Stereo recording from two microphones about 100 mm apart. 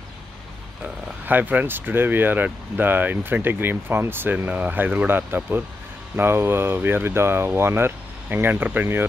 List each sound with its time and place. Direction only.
0.8 s speech: 15° right (ahead or behind)